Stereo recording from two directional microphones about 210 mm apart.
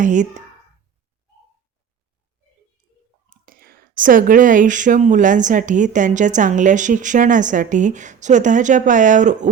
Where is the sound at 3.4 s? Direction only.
45° right (ahead or behind).